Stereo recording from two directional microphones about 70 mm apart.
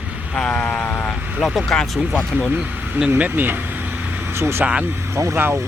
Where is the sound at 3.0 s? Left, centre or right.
Right.